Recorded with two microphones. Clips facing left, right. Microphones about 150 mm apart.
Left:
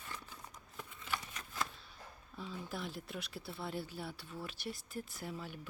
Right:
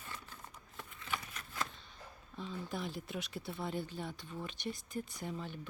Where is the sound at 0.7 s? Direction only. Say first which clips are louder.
Even; 5° left (ahead or behind).